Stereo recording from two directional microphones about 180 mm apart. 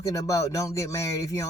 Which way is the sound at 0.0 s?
15° left (ahead or behind).